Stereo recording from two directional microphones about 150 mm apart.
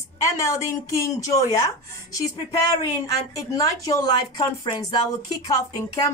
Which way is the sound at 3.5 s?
25° left (ahead or behind).